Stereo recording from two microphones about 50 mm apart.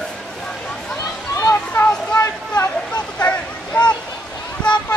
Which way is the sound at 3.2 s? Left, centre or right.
Left.